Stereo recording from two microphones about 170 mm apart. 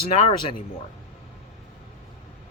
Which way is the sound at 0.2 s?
35° left (ahead or behind).